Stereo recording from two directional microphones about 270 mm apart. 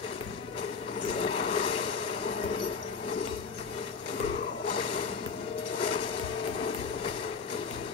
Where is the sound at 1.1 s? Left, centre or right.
Left.